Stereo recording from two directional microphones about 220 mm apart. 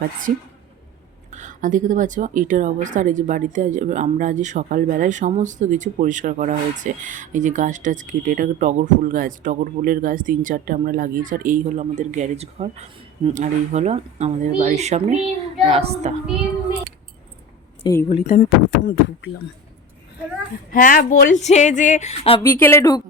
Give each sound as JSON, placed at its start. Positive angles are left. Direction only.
{"t": 1.3, "sound": "a woman's voice", "side_deg": -35}
{"t": 17.8, "sound": "a woman's voice", "side_deg": 15}
{"t": 18.2, "sound": "speech", "side_deg": 40}
{"t": 18.7, "sound": "speech", "side_deg": 60}
{"t": 20.7, "sound": "speech", "side_deg": 40}
{"t": 22.6, "sound": "a woman's voice", "side_deg": 15}